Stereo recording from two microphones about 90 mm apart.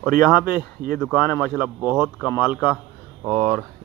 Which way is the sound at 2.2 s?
20° left (ahead or behind).